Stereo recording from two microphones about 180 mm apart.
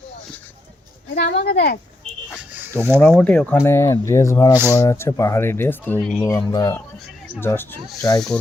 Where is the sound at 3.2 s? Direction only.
5° left (ahead or behind).